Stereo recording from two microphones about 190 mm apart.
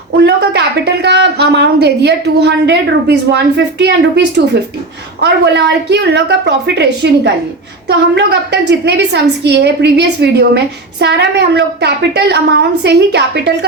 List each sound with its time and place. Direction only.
0.2 s a woman's voice: 65° right (ahead or behind)
5.2 s a woman's voice: 65° right (ahead or behind)